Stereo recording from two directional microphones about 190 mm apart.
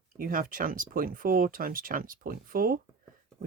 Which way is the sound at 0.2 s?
45° right (ahead or behind).